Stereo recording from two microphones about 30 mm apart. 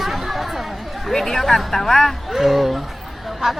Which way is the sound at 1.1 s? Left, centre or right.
Centre.